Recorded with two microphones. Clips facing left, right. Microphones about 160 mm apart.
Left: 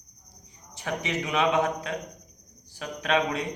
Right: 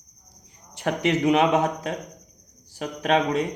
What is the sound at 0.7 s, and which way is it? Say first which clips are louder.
Speech: right 7 dB; 60° right (ahead or behind).